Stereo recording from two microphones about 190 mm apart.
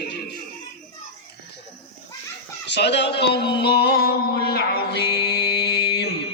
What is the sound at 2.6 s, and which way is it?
Speech, 65° left (ahead or behind).